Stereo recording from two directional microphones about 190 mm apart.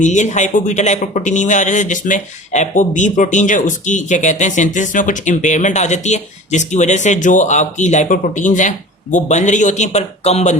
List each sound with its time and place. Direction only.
0.0 s speech: 40° left (ahead or behind)